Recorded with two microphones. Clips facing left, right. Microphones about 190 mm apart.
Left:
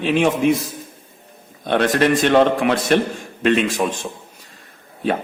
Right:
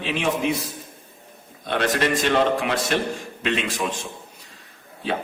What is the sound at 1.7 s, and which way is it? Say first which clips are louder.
A man's voice: left 6 dB; 50° left (ahead or behind).